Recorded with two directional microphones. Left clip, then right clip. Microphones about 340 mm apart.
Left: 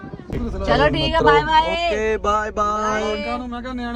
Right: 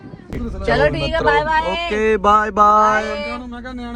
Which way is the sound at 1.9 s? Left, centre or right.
Centre.